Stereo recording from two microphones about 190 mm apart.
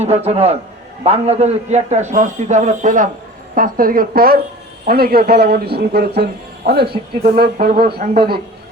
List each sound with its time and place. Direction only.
0.0 s a man's voice: 35° right (ahead or behind); by 6.9 s 60° right (ahead or behind)
6.9 s a man's voice: 35° right (ahead or behind)
7.3 s a man's voice: 55° right (ahead or behind)